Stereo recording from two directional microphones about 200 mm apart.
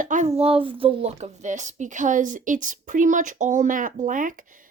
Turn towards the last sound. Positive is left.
turn(degrees=-40)  # may be behind; listen again after turning